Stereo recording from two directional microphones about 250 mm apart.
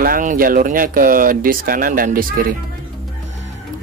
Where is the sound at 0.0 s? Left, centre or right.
Right.